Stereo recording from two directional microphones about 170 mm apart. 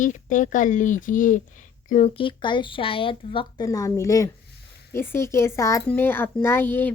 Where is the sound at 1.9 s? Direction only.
35° left (ahead or behind).